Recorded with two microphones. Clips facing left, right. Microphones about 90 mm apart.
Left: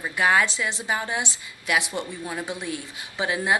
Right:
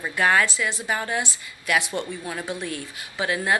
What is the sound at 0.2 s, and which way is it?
Speech, 15° left (ahead or behind).